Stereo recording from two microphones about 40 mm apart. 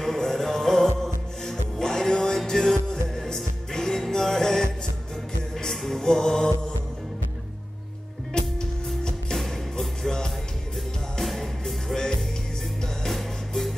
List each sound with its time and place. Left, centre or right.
0.0 s music: centre
5.7 s music: centre
8.3 s music: centre
9.4 s music: centre
11.2 s music: centre
13.5 s music: centre